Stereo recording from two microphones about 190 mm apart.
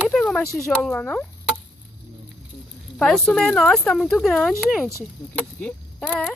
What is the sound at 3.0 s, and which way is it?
Speech, 5° left (ahead or behind).